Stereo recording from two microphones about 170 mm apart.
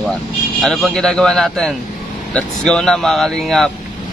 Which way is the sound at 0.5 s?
Centre (ahead or behind).